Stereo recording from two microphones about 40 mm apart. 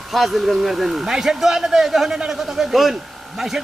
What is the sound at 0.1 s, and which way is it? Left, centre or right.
Speech, centre.